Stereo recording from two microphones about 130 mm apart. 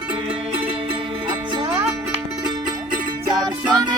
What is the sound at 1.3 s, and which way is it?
Music, 35° right (ahead or behind).